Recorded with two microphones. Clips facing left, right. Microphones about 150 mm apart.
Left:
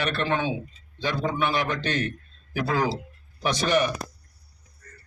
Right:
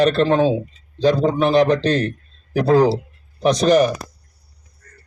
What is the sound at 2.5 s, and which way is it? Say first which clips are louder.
A man's voice: right 11 dB; 40° right (ahead or behind).